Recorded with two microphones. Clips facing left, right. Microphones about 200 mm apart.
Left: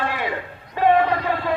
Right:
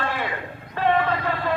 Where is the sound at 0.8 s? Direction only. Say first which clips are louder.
Left 4 dB; 15° left (ahead or behind).